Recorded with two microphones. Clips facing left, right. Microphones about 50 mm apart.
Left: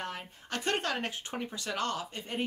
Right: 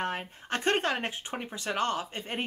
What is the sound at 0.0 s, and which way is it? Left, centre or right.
Speech, right.